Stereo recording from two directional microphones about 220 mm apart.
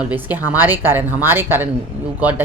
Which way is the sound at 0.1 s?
10° right (ahead or behind).